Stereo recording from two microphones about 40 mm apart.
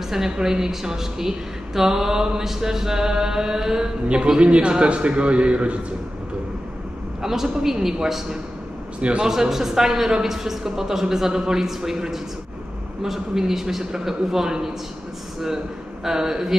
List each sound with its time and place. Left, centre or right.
0.1 s a woman's voice: centre; by 5.8 s right
7.2 s a sound: centre
7.6 s a woman's voice: centre